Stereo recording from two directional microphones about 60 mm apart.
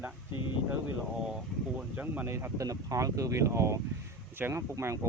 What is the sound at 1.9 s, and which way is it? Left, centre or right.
Speech, right.